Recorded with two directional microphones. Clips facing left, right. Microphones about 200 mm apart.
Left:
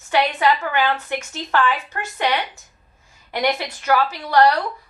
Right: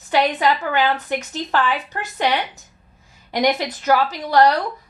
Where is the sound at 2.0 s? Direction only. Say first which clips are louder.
Right 1 dB; 35° right (ahead or behind).